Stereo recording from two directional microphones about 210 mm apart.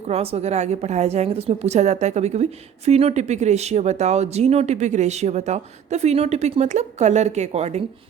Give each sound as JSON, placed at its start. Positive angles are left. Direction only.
{"t": 0.1, "sound": "a woman's voice", "side_deg": -30}